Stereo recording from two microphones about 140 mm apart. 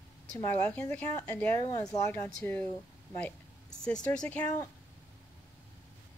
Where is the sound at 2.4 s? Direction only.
10° left (ahead or behind).